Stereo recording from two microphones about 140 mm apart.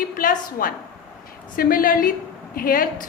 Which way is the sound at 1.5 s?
90° left.